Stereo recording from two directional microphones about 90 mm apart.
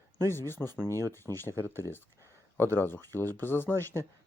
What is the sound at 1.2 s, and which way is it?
Speech, 30° left (ahead or behind).